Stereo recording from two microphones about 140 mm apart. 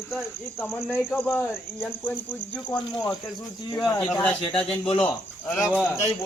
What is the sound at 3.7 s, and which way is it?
Speech, 25° left (ahead or behind).